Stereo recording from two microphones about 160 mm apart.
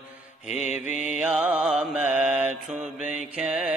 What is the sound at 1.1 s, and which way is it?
Mantra, 5° right (ahead or behind).